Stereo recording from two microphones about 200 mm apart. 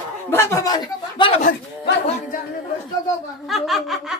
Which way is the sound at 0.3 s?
15° left (ahead or behind).